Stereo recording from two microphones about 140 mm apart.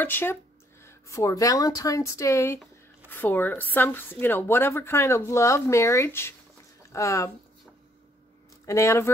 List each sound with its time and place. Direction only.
0.0 s speech: 15° left (ahead or behind)
8.6 s speech: 20° left (ahead or behind)